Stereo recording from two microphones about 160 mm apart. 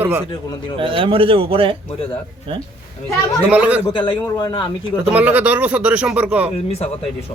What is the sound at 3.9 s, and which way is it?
Speech, 30° left (ahead or behind).